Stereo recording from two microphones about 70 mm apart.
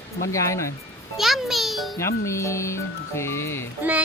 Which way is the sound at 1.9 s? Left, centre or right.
Left.